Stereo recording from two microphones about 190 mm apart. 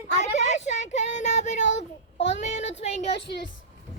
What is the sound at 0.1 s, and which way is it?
Child singing, 40° left (ahead or behind).